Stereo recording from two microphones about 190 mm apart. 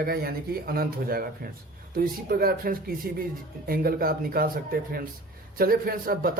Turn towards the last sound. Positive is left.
turn(degrees=-50)  # may be behind; listen again after turning